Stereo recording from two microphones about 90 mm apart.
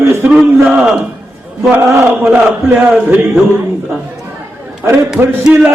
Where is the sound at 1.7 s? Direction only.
30° right (ahead or behind).